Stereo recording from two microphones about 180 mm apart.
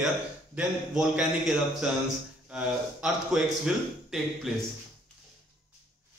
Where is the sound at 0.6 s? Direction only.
5° right (ahead or behind).